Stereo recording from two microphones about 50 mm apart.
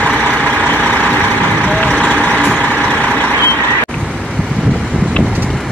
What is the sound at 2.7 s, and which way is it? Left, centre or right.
Vehicle, right.